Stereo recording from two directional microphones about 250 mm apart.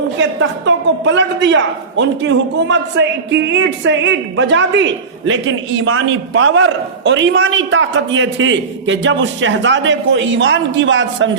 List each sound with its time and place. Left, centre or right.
0.2 s a man's voice: right